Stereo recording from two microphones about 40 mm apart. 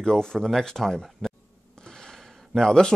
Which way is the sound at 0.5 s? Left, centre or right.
Centre.